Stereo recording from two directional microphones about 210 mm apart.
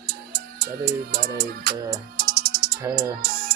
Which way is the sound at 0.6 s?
50° right (ahead or behind).